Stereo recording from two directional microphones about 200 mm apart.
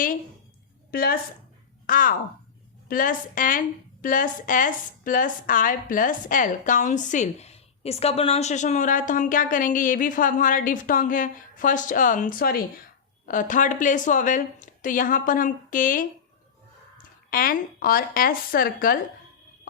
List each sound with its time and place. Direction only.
0.9 s a woman's voice: 50° left (ahead or behind)
17.3 s speech: 45° left (ahead or behind)